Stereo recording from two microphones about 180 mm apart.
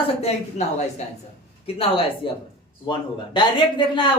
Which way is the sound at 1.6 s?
30° left (ahead or behind).